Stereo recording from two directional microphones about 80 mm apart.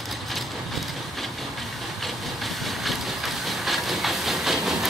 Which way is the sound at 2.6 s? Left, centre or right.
Centre.